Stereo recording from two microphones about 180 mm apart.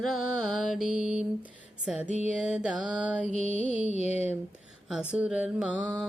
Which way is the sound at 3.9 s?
40° left (ahead or behind).